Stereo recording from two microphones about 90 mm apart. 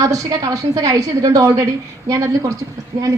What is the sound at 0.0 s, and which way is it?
A woman's voice, 40° right (ahead or behind).